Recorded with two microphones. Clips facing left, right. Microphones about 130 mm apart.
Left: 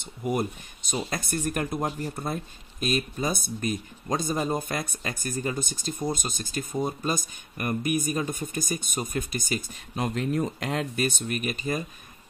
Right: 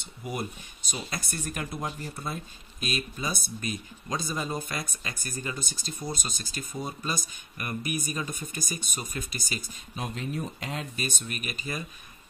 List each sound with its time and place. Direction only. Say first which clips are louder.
0.2 s speech: left 7 dB; 50° left (ahead or behind)
9.9 s speech: left 7 dB; 85° left
11.2 s speech: left 7 dB; 40° left (ahead or behind)